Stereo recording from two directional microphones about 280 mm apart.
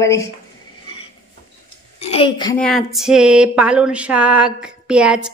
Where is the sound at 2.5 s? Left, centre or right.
Centre.